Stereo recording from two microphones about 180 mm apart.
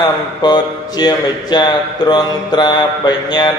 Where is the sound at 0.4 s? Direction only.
25° left (ahead or behind).